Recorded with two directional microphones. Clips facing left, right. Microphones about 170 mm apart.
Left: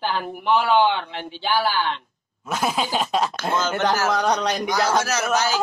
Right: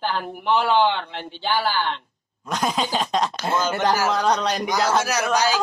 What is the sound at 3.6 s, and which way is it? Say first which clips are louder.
Speech: right 1 dB; 10° right (ahead or behind).